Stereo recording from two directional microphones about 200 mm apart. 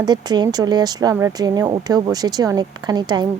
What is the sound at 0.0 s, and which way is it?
A woman's voice, 20° right (ahead or behind).